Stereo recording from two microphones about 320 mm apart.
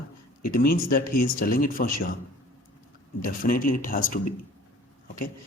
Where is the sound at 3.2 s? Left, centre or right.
Left.